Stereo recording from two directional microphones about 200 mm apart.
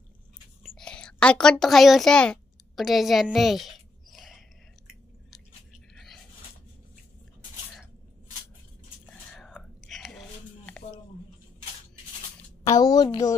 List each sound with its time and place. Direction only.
0.7 s whispering: 5° left (ahead or behind)
9.3 s whispering: centre (ahead or behind)
12.6 s a sound: 20° left (ahead or behind)